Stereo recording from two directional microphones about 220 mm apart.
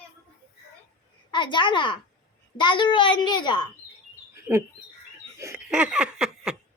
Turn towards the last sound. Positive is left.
turn(degrees=-5)  # may be behind; listen again after turning